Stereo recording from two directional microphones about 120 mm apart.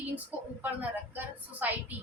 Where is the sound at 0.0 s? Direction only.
15° right (ahead or behind).